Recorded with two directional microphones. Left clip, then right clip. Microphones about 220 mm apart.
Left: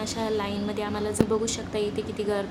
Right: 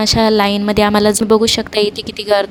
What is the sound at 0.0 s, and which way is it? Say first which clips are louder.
A woman's voice: right 16 dB; 45° right (ahead or behind).